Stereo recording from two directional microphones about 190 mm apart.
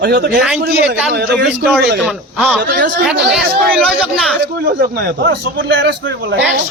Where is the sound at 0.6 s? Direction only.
60° right (ahead or behind).